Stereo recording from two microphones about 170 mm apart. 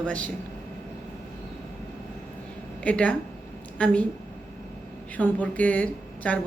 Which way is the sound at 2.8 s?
5° left (ahead or behind).